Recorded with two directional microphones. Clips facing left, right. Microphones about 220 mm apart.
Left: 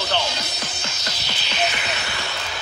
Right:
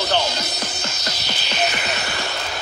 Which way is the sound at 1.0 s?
40° right (ahead or behind).